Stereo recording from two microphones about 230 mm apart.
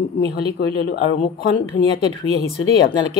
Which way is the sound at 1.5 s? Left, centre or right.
Left.